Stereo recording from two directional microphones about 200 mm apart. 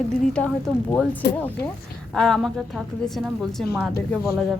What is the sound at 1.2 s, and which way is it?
Speech, 55° left (ahead or behind).